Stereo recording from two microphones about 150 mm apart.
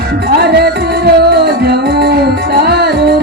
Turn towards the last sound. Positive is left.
turn(degrees=-90)